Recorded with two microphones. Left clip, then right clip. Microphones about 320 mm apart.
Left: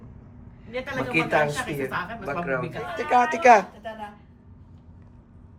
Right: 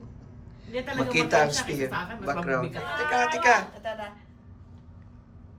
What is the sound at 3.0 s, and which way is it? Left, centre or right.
Speech, centre.